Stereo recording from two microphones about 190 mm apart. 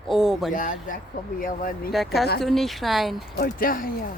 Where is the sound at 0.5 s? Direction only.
45° left (ahead or behind).